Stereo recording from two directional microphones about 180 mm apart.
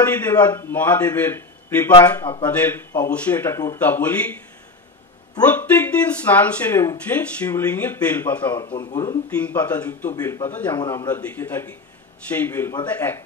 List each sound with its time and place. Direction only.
0.0 s speech: 10° left (ahead or behind)
1.9 s speech: 25° left (ahead or behind)
2.4 s speech: 10° left (ahead or behind)
5.5 s speech: 10° left (ahead or behind)
8.6 s speech: 25° left (ahead or behind)
9.4 s speech: 10° left (ahead or behind)